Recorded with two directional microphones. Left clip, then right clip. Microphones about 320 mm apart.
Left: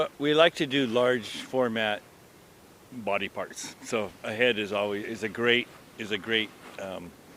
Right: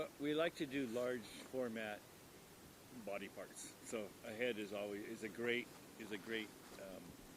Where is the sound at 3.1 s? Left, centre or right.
Left.